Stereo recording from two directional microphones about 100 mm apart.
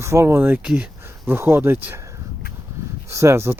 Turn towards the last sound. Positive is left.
turn(degrees=-25)  # may be behind; listen again after turning